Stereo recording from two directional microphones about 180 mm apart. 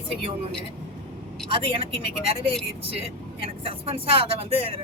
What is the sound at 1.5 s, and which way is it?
Speech, 30° right (ahead or behind).